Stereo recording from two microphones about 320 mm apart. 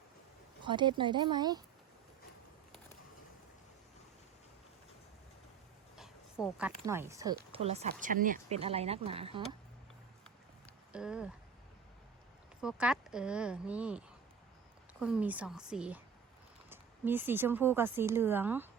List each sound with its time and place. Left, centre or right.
0.6 s speech: centre
6.0 s speech: centre
10.9 s speech: centre
12.6 s speech: centre
15.0 s speech: centre